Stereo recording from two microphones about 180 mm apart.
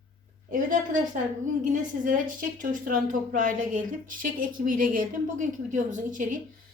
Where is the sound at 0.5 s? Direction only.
45° right (ahead or behind).